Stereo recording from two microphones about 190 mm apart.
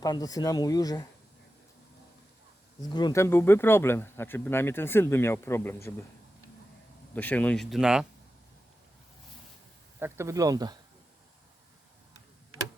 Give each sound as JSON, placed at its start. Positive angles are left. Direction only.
{"t": 0.0, "sound": "speech", "side_deg": 20}
{"t": 2.8, "sound": "speech", "side_deg": 20}
{"t": 7.1, "sound": "speech", "side_deg": 10}
{"t": 10.0, "sound": "speech", "side_deg": -15}